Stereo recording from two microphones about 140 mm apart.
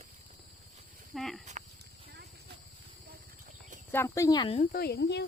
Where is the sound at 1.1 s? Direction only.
Centre (ahead or behind).